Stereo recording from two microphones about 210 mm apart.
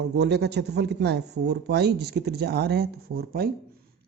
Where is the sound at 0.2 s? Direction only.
50° right (ahead or behind).